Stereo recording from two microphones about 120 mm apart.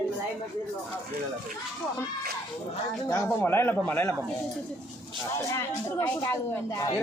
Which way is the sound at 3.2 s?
15° left (ahead or behind).